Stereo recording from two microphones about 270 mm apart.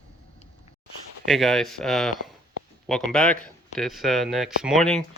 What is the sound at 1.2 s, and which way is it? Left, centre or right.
Speech, centre.